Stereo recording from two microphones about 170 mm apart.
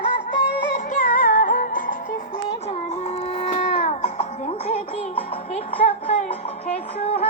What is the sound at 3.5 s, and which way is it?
Music, 45° left (ahead or behind).